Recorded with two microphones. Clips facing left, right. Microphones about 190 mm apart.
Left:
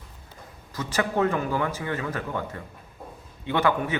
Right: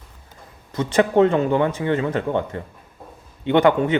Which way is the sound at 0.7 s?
30° right (ahead or behind).